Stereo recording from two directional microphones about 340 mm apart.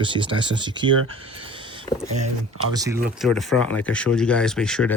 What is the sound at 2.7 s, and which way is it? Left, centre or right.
Speech, centre.